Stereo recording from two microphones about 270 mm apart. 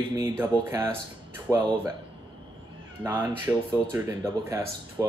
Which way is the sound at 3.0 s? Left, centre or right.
Centre.